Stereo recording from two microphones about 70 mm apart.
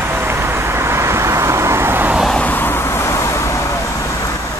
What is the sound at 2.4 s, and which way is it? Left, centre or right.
Vehicle, left.